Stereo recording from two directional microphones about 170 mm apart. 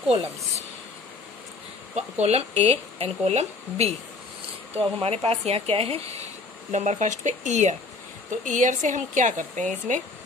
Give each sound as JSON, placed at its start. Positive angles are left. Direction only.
{"t": 2.0, "sound": "speech", "side_deg": -40}